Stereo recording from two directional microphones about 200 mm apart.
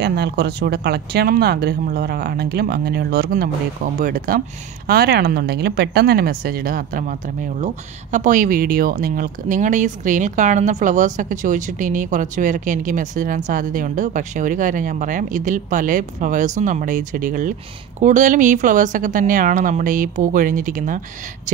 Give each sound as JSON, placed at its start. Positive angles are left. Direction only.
{"t": 0.0, "sound": "speech", "side_deg": -55}